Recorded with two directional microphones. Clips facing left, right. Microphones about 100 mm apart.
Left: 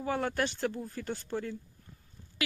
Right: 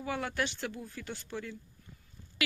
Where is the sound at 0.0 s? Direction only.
35° left (ahead or behind).